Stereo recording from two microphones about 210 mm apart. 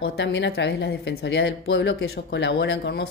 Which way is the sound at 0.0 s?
55° left (ahead or behind).